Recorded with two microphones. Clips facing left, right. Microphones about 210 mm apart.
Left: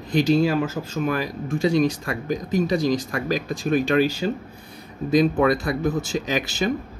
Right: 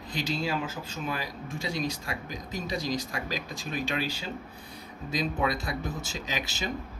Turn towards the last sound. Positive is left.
turn(degrees=55)  # may be behind; listen again after turning